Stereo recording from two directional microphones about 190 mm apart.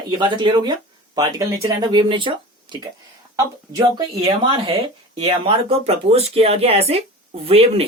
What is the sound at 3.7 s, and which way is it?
Speech, 20° right (ahead or behind).